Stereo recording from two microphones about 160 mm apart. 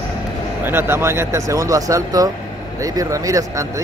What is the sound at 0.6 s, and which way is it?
Speech, 15° right (ahead or behind).